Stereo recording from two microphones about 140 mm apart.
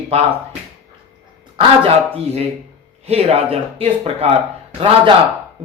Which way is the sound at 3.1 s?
45° right (ahead or behind).